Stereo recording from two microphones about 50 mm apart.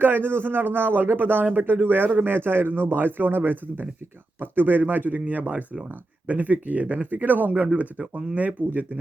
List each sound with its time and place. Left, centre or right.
0.0 s a man's voice: right